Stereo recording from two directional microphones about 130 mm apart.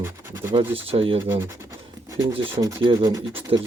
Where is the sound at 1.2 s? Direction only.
20° right (ahead or behind).